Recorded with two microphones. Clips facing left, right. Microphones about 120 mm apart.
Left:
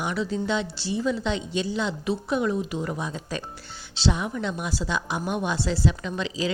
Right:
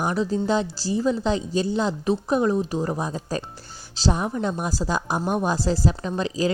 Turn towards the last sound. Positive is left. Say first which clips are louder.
# right 4 dB
turn(degrees=-40)  # may be behind; listen again after turning